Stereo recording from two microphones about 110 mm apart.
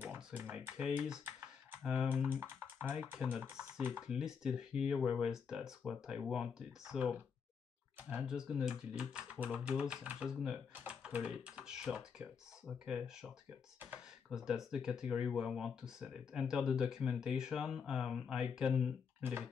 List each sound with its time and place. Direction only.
0.0 s speech: 15° right (ahead or behind)
2.4 s speech: 20° right (ahead or behind)